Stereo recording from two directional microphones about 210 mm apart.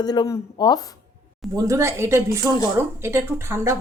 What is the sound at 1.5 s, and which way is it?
Speech, 15° right (ahead or behind).